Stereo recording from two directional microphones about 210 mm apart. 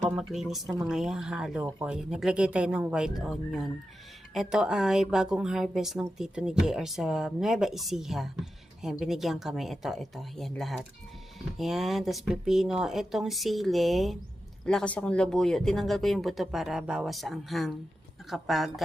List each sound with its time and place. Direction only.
0.2 s speech: centre (ahead or behind)